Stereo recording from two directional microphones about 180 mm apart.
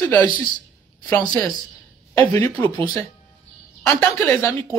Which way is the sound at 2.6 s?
30° right (ahead or behind).